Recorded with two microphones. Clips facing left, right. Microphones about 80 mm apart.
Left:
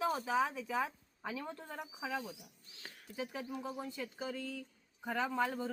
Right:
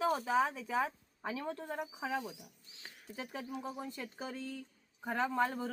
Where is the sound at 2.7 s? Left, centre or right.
Centre.